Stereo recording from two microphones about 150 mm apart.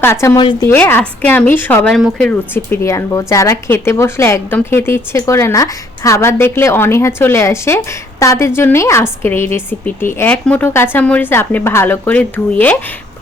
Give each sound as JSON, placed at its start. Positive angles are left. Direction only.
{"t": 0.0, "sound": "a woman's voice", "side_deg": 15}
{"t": 0.3, "sound": "a woman's voice", "side_deg": 30}
{"t": 0.7, "sound": "a woman's voice", "side_deg": 15}
{"t": 1.9, "sound": "speech", "side_deg": 0}
{"t": 2.6, "sound": "a woman's voice", "side_deg": 20}